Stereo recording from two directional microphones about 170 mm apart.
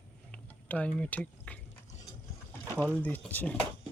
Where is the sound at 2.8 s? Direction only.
10° left (ahead or behind).